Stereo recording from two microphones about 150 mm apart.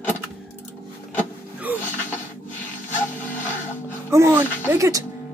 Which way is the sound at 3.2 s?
15° left (ahead or behind).